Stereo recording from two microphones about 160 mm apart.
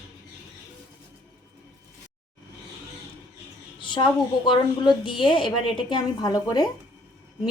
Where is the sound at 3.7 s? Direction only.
30° left (ahead or behind).